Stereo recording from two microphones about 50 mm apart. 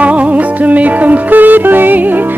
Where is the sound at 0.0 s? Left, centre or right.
Right.